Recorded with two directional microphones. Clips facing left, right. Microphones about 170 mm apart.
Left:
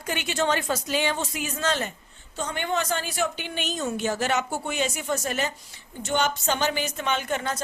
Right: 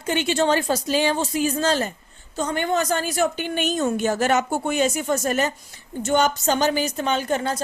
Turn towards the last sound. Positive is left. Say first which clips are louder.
# right 5 dB
turn(degrees=-35)  # may be behind; listen again after turning